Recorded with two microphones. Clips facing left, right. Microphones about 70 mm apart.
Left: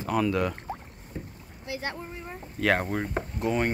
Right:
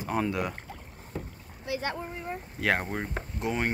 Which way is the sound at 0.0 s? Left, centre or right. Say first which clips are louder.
Left 3 dB; right.